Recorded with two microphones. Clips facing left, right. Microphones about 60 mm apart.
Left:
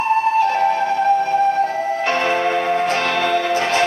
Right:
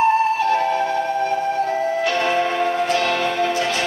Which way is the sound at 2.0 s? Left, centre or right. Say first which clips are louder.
Left 3 dB; left.